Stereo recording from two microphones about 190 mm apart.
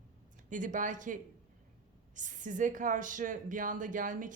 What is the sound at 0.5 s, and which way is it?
Speech, 40° right (ahead or behind).